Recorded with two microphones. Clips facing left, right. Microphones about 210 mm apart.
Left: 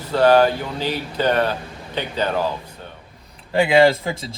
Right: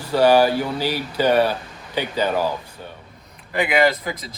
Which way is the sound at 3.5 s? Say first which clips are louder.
Left 4 dB; 30° left (ahead or behind).